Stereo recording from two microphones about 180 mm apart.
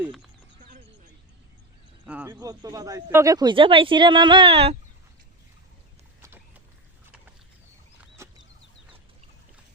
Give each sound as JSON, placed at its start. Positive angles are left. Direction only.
{"t": 0.0, "sound": "speech", "side_deg": 0}
{"t": 2.0, "sound": "speech", "side_deg": -5}
{"t": 2.3, "sound": "speech", "side_deg": -20}
{"t": 6.2, "sound": "a sound", "side_deg": -10}